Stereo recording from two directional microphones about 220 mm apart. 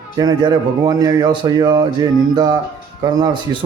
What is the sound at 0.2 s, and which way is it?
Speech, 15° right (ahead or behind).